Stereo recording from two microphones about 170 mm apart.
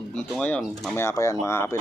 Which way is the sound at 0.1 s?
5° left (ahead or behind).